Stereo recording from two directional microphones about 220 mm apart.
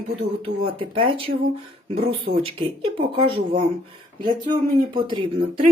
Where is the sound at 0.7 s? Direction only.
25° right (ahead or behind).